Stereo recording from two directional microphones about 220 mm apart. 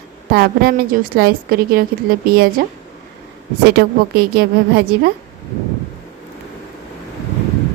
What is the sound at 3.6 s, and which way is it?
A woman's voice, 45° right (ahead or behind).